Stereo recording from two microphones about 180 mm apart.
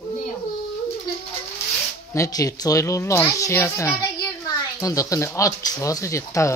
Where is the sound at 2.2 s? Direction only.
20° left (ahead or behind).